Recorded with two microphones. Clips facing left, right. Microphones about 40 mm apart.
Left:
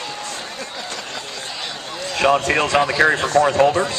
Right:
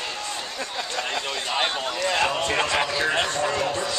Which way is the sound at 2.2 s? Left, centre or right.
Left.